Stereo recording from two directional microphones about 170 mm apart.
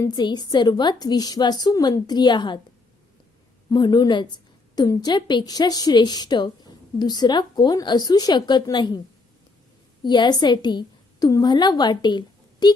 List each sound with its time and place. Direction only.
0.0 s a woman's voice: 25° left (ahead or behind)
3.7 s a woman's voice: 25° left (ahead or behind)
10.0 s a woman's voice: 25° left (ahead or behind)